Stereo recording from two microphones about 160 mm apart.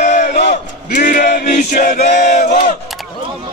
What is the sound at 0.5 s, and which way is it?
Male singing, 50° left (ahead or behind).